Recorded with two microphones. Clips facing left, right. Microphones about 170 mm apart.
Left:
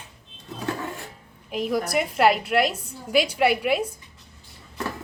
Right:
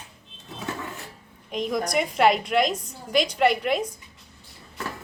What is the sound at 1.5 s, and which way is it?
A woman's voice, 5° left (ahead or behind).